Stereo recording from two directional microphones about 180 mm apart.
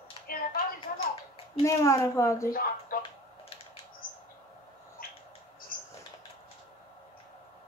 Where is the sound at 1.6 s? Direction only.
15° left (ahead or behind).